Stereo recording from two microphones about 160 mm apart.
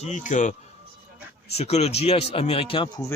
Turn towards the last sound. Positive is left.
turn(degrees=30)  # may be behind; listen again after turning